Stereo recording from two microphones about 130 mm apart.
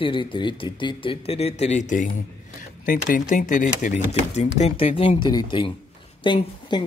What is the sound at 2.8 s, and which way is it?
Speech, 90° left.